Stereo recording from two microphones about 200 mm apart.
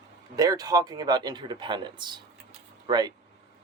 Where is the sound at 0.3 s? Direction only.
20° right (ahead or behind).